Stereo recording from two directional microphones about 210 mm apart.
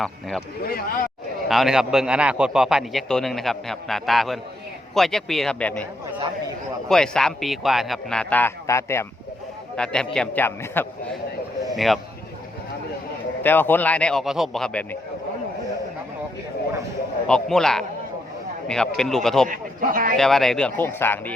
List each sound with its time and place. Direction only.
0.0 s a man's voice: centre (ahead or behind)
0.6 s speech: 45° left (ahead or behind)
1.5 s a man's voice: centre (ahead or behind)
13.4 s a man's voice: 10° left (ahead or behind)
17.2 s a man's voice: 5° left (ahead or behind)
18.9 s a man's voice: centre (ahead or behind)
19.5 s a man's voice: 40° right (ahead or behind)
20.1 s a man's voice: centre (ahead or behind)